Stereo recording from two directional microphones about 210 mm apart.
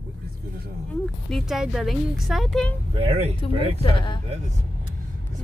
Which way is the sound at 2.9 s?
25° right (ahead or behind).